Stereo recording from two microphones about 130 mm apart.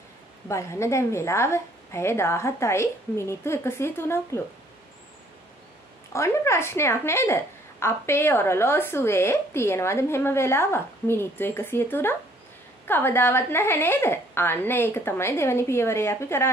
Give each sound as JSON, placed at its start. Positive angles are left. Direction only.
{"t": 0.5, "sound": "a woman's voice", "side_deg": 20}
{"t": 6.1, "sound": "a woman's voice", "side_deg": 20}